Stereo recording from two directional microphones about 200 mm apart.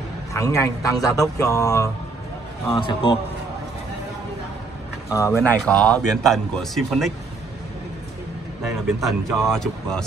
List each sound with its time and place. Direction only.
0.3 s a man's voice: 15° left (ahead or behind)
5.1 s a man's voice: 15° left (ahead or behind)
8.6 s a man's voice: centre (ahead or behind)